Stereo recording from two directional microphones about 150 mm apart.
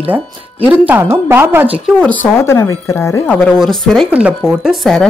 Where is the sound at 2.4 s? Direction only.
20° left (ahead or behind).